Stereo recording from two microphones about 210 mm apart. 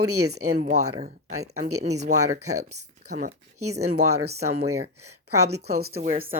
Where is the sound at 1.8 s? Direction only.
30° right (ahead or behind).